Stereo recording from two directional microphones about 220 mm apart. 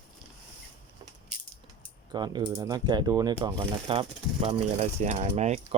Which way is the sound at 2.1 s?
20° right (ahead or behind).